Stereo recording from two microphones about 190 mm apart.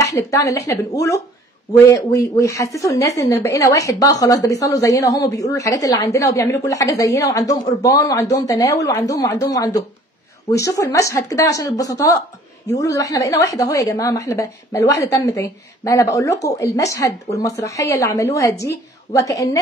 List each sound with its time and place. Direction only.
0.0 s speech: 15° left (ahead or behind)